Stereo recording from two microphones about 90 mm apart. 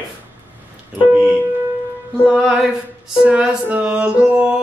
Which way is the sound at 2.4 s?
5° right (ahead or behind).